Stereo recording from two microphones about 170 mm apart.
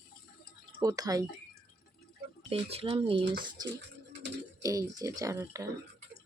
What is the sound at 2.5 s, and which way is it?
Speech, 35° right (ahead or behind).